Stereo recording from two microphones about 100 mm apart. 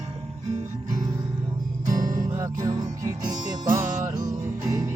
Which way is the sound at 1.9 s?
35° right (ahead or behind).